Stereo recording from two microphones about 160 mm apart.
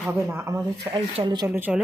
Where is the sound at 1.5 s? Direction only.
10° right (ahead or behind).